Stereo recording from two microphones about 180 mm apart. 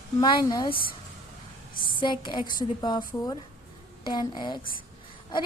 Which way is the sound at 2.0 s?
25° left (ahead or behind).